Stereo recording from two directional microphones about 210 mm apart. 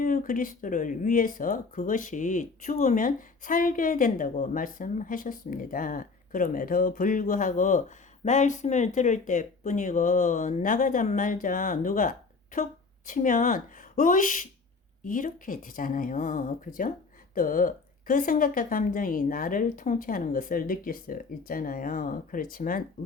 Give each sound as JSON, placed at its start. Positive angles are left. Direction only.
{"t": 0.0, "sound": "speech", "side_deg": 40}